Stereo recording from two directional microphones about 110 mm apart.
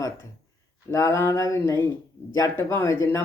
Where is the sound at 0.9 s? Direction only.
30° left (ahead or behind).